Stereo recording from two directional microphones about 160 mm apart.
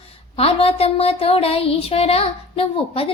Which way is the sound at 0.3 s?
35° left (ahead or behind).